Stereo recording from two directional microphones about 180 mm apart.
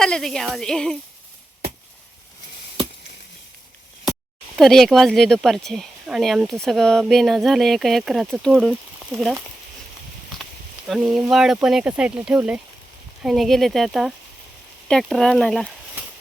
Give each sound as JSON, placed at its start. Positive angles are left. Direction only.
{"t": 0.0, "sound": "speech", "side_deg": 0}
{"t": 4.5, "sound": "speech", "side_deg": 0}
{"t": 10.8, "sound": "speech", "side_deg": 0}